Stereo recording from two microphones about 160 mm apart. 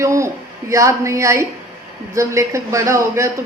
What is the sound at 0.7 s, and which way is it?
A woman's voice, 20° right (ahead or behind).